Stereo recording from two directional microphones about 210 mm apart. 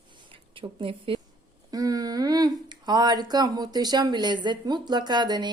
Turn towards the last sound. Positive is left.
turn(degrees=-20)  # may be behind; listen again after turning